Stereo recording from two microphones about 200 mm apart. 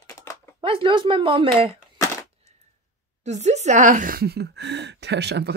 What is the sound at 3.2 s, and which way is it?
Speech, 35° right (ahead or behind).